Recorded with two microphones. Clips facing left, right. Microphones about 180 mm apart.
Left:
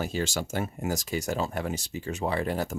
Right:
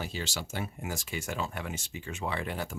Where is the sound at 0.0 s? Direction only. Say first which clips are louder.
Left 7 dB; 45° left (ahead or behind).